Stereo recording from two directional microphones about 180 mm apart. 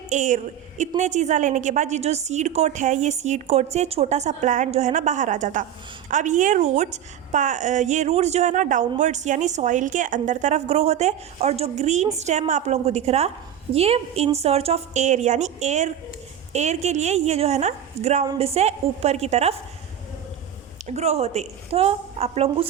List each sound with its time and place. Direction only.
0.1 s a woman's voice: 40° right (ahead or behind)
20.8 s a woman's voice: 40° right (ahead or behind)